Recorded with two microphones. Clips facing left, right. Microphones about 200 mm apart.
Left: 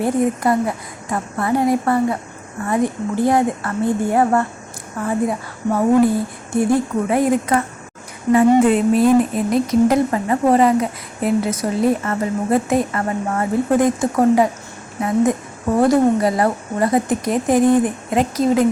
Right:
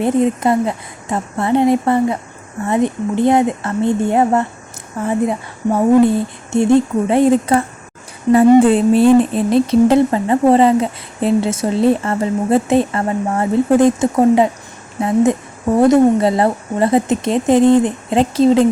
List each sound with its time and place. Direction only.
0.0 s speech: 20° right (ahead or behind)